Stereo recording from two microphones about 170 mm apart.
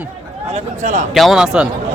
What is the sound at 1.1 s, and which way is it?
Speech, centre (ahead or behind).